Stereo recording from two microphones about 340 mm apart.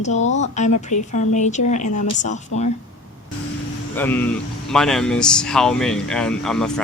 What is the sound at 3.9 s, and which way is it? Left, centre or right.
Speech, centre.